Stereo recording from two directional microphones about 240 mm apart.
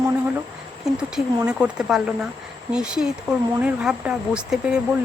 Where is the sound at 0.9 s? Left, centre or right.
Centre.